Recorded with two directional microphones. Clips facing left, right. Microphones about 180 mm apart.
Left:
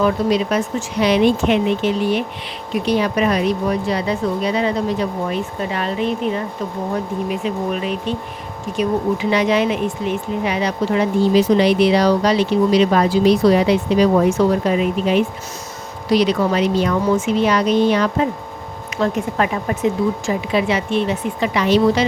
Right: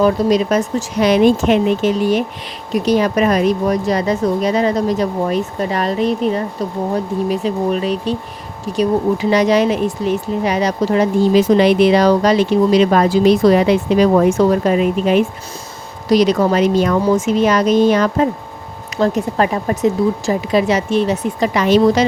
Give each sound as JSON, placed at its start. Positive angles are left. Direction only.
{"t": 0.0, "sound": "speech", "side_deg": -40}